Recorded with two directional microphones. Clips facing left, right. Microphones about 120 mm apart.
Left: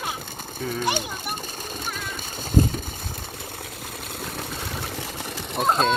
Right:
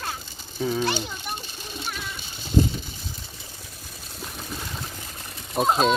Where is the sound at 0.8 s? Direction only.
15° left (ahead or behind).